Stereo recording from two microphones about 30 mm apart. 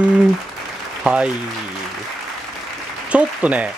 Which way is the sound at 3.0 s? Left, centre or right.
Right.